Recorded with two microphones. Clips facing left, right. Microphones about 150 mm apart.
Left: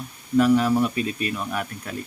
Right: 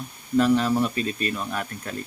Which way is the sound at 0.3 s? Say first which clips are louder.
Left 2 dB; 10° left (ahead or behind).